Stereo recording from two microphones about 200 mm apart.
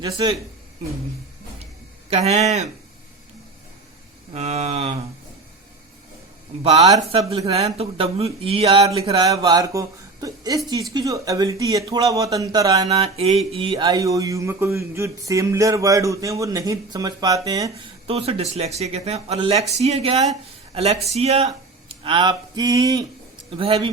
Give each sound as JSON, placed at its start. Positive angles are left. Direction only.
{"t": 0.0, "sound": "speech", "side_deg": -25}
{"t": 2.0, "sound": "speech", "side_deg": -30}
{"t": 4.4, "sound": "speech", "side_deg": -30}
{"t": 6.6, "sound": "speech", "side_deg": -30}
{"t": 6.8, "sound": "speech", "side_deg": -20}
{"t": 9.2, "sound": "speech", "side_deg": -20}
{"t": 18.1, "sound": "speech", "side_deg": -30}